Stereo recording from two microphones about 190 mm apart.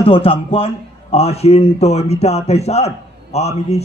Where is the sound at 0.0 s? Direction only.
30° left (ahead or behind).